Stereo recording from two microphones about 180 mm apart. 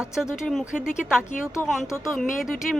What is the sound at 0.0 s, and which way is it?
Speech, 5° right (ahead or behind).